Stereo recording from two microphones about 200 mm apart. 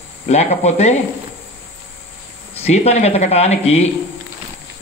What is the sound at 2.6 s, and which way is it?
Speech, 30° left (ahead or behind).